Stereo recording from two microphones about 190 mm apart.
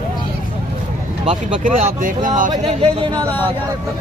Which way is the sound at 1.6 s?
45° right (ahead or behind).